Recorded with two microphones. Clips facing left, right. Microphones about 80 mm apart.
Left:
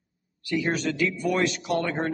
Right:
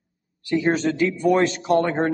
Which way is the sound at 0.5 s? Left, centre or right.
Right.